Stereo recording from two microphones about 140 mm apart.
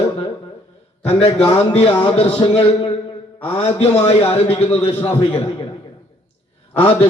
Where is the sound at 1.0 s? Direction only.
45° left (ahead or behind).